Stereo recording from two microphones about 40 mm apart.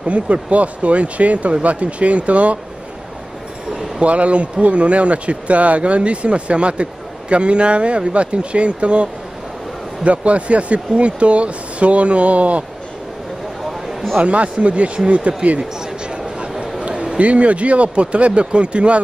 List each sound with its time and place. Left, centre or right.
0.0 s speech: right
4.0 s speech: right
14.2 s speech: right
16.1 s a sound: right
17.2 s speech: right